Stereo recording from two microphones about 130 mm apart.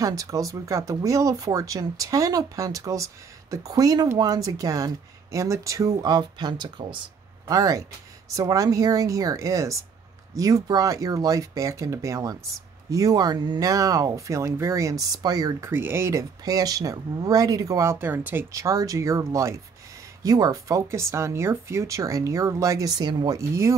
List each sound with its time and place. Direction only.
0.0 s speech: 25° right (ahead or behind)
15.7 s speech: 15° right (ahead or behind)